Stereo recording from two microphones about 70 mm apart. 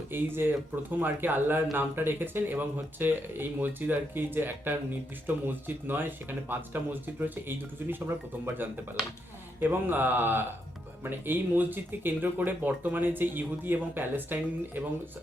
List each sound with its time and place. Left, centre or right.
0.1 s speech: right
9.6 s speech: right